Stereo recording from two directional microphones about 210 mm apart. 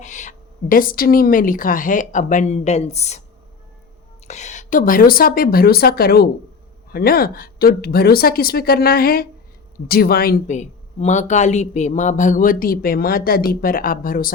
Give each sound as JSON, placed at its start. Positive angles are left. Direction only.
{"t": 0.0, "sound": "speech", "side_deg": 35}
{"t": 4.3, "sound": "a woman's voice", "side_deg": 35}